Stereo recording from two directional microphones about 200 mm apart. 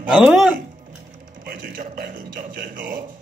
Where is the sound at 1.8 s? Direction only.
45° right (ahead or behind).